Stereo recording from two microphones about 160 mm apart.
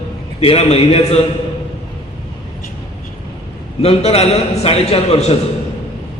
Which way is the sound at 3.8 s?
40° left (ahead or behind).